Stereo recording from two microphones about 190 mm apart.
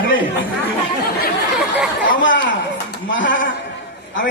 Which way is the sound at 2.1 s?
80° left.